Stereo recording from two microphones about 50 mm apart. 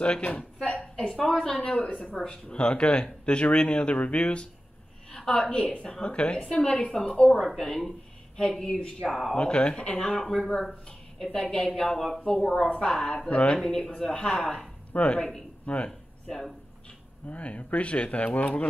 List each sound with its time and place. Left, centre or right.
0.0 s a woman's voice: left
1.5 s speech: left
8.8 s speech: centre
9.3 s speech: left
12.6 s speech: centre
15.9 s speech: centre
17.3 s speech: left